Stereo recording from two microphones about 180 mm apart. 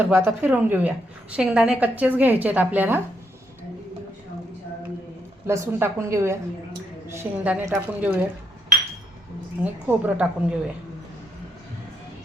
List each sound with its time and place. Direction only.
0.0 s a woman's voice: 10° right (ahead or behind)
5.5 s a woman's voice: 15° right (ahead or behind)
9.6 s a woman's voice: 10° right (ahead or behind)